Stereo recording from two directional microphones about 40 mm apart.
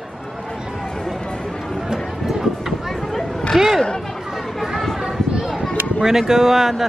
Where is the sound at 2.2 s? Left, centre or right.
Centre.